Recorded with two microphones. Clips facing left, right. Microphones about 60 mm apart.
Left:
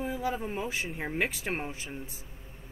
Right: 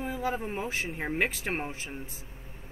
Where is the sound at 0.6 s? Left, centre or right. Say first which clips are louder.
Right 1 dB; centre.